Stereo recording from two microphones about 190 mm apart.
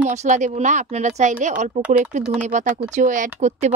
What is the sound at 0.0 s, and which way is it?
Speech, 40° right (ahead or behind).